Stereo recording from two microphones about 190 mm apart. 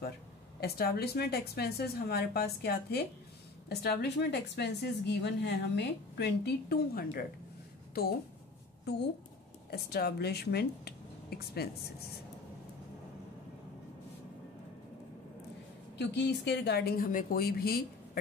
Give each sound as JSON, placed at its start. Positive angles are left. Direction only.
{"t": 0.6, "sound": "a woman's voice", "side_deg": 55}
{"t": 9.7, "sound": "speech", "side_deg": 55}
{"t": 16.0, "sound": "speech", "side_deg": 65}